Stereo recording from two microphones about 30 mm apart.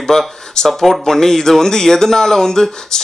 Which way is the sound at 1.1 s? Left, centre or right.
Centre.